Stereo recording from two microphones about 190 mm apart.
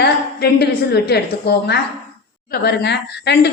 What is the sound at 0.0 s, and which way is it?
A woman's voice, 55° left (ahead or behind).